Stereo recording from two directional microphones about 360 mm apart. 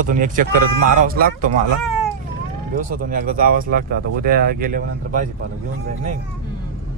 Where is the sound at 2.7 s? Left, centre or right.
Right.